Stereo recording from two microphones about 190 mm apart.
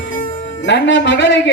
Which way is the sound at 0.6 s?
70° left (ahead or behind).